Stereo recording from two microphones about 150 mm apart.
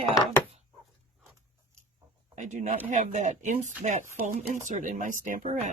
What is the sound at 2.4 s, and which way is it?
Speech, 55° right (ahead or behind).